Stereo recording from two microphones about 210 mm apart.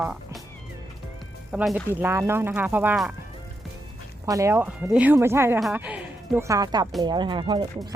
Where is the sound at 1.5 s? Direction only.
5° right (ahead or behind).